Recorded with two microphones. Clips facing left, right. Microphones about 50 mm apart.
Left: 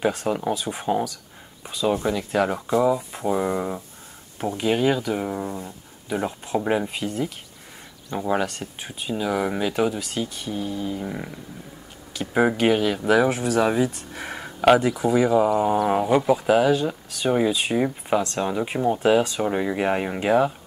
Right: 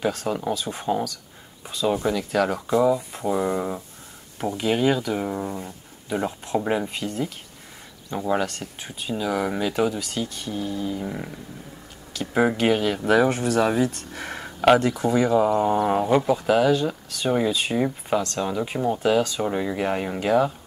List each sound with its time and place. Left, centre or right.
0.0 s speech: centre
18.2 s speech: left
19.4 s speech: centre